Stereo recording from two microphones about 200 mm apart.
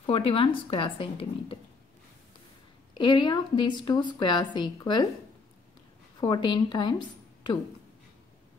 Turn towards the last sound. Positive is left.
turn(degrees=20)  # may be behind; listen again after turning